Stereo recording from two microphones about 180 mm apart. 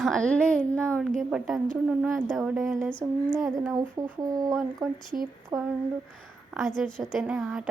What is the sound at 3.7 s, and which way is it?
Speech, 20° right (ahead or behind).